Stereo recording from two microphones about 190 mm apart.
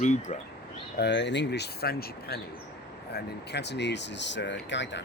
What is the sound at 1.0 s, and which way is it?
Speech, 65° left (ahead or behind).